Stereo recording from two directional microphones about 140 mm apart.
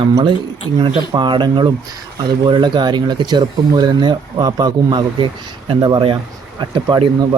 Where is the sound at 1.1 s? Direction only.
35° right (ahead or behind).